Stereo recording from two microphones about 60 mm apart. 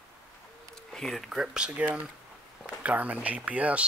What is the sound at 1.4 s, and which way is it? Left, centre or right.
Speech, centre.